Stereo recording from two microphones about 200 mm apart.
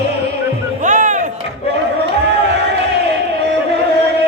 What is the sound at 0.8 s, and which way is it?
Music, 40° right (ahead or behind).